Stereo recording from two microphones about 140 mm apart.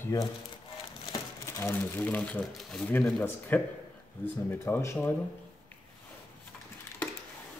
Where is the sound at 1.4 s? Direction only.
15° left (ahead or behind).